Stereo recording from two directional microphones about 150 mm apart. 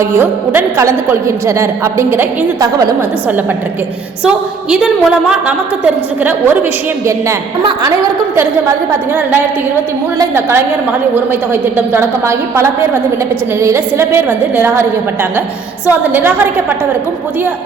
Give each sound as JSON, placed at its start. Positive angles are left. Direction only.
{"t": 0.0, "sound": "a woman's voice", "side_deg": -15}
{"t": 4.2, "sound": "a woman's voice", "side_deg": -5}
{"t": 10.2, "sound": "a woman's voice", "side_deg": -15}